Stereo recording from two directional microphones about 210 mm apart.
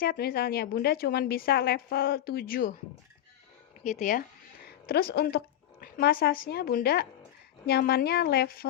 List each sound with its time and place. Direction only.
0.0 s a woman's voice: 45° left (ahead or behind)
3.8 s speech: 35° left (ahead or behind)
4.9 s a woman's voice: 50° left (ahead or behind)